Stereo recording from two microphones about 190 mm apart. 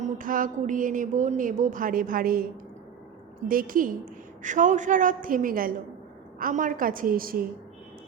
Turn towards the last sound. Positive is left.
turn(degrees=-50)  # may be behind; listen again after turning